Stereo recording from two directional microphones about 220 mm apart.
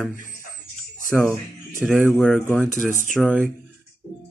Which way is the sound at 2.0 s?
10° left (ahead or behind).